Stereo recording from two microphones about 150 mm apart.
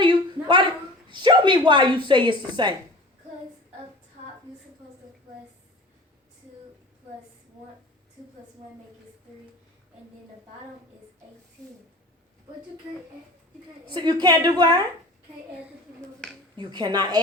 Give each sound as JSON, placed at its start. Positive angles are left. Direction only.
{"t": 0.0, "sound": "a sound", "side_deg": -30}
{"t": 1.1, "sound": "a woman's voice", "side_deg": -30}
{"t": 13.9, "sound": "a woman's voice", "side_deg": -30}
{"t": 16.6, "sound": "a woman's voice", "side_deg": -30}